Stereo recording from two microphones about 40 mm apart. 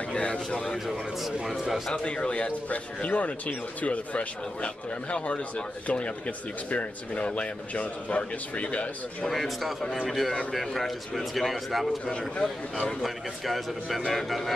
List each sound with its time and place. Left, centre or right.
0.2 s speech: left
1.4 s speech: centre
2.0 s speech: left
2.7 s speech: left
9.3 s speech: centre
12.1 s speech: left
13.0 s speech: centre